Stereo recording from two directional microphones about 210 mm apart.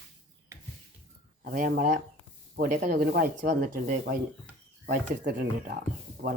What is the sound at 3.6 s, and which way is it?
Speech, 40° right (ahead or behind).